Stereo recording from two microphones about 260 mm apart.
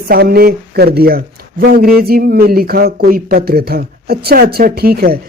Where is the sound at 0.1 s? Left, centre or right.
Right.